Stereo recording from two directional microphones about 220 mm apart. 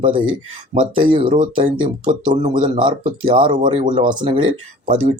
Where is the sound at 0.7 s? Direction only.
25° right (ahead or behind).